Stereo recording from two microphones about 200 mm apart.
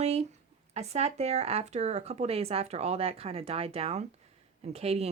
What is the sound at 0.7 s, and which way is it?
Speech, 30° right (ahead or behind).